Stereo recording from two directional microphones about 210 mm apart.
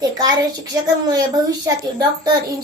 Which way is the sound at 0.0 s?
20° right (ahead or behind).